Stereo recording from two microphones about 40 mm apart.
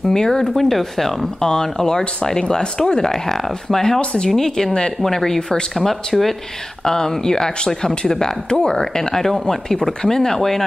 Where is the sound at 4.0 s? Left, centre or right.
Left.